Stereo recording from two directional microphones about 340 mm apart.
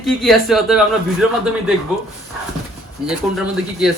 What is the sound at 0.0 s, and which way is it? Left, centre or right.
Speech, centre.